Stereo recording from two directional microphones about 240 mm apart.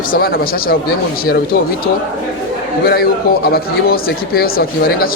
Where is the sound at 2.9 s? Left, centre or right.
Left.